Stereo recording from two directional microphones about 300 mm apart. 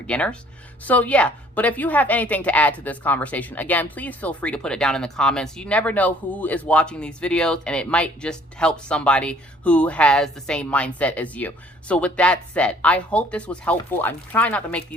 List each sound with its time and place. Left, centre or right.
0.1 s a woman's voice: centre